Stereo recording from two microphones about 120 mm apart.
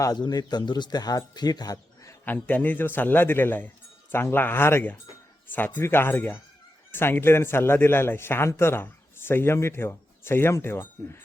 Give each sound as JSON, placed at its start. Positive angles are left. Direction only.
{"t": 0.0, "sound": "speech", "side_deg": 35}
{"t": 2.2, "sound": "a man's voice", "side_deg": 15}